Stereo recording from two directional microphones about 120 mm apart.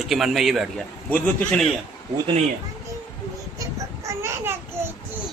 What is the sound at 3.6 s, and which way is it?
Babbling, 25° right (ahead or behind).